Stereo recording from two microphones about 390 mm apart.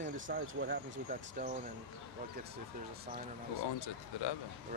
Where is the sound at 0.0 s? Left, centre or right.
Right.